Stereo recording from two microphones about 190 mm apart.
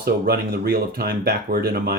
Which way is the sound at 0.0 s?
55° right (ahead or behind).